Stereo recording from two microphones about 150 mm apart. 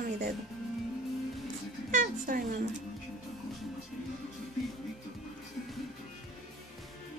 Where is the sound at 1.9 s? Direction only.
65° right (ahead or behind).